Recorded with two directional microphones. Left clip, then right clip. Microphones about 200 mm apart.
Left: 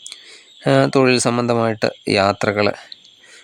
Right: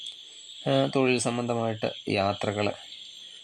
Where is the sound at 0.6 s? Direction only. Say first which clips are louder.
Left 10 dB; 35° left (ahead or behind).